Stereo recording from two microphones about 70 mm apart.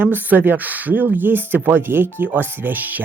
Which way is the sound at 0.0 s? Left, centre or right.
Right.